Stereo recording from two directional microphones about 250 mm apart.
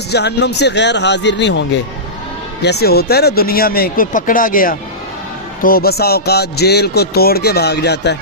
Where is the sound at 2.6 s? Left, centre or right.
Left.